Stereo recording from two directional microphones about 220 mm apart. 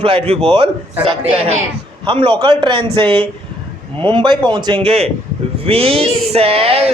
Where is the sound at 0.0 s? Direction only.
25° right (ahead or behind).